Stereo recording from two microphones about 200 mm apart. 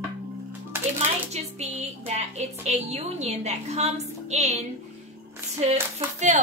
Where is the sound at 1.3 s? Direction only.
35° right (ahead or behind).